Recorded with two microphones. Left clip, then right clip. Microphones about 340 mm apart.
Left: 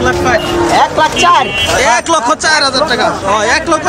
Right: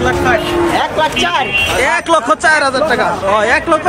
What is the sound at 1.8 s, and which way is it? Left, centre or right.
Speech, centre.